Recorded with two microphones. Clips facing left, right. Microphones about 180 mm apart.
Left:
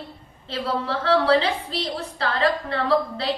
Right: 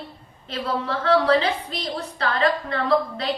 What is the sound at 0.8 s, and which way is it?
A woman's voice, 30° left (ahead or behind).